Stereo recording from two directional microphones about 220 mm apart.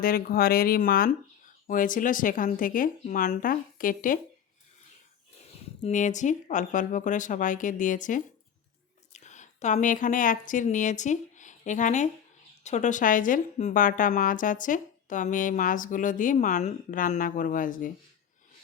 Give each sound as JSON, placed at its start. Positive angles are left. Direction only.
{"t": 0.0, "sound": "a woman's voice", "side_deg": 40}
{"t": 5.5, "sound": "a woman's voice", "side_deg": 35}